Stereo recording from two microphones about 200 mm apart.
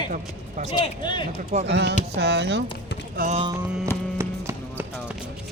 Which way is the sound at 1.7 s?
60° right (ahead or behind).